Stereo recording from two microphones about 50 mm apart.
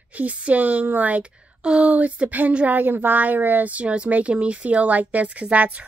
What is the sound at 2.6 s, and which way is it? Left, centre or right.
A woman's voice, right.